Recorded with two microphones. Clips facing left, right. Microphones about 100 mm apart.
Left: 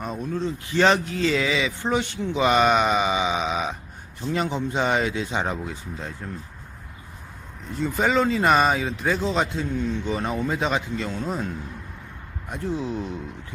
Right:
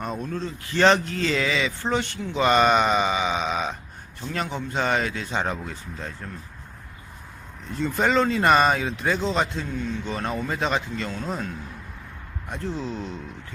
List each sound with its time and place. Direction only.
0.0 s speech: 5° left (ahead or behind)
0.3 s speech: 15° left (ahead or behind)
7.8 s speech: 5° left (ahead or behind)
12.5 s speech: 10° left (ahead or behind)